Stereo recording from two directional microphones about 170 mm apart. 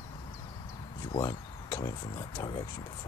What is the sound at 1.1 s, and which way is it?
Speech, 20° left (ahead or behind).